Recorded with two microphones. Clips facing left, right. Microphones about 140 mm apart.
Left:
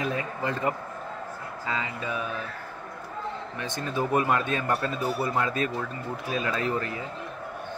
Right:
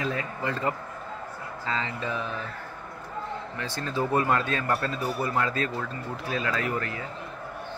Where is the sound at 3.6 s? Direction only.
15° left (ahead or behind).